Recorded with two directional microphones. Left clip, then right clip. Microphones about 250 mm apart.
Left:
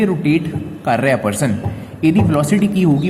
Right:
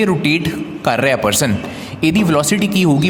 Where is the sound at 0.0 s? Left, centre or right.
Right.